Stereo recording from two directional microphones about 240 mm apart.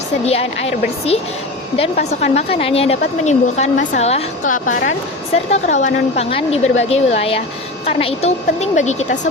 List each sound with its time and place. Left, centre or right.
0.3 s a woman's voice: left